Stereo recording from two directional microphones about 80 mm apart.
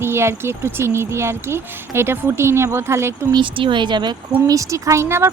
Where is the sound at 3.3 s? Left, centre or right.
Right.